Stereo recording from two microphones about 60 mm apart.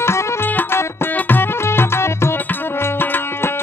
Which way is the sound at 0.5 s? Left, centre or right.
Left.